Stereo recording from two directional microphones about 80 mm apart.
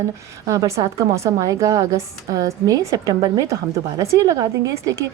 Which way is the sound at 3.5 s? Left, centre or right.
Right.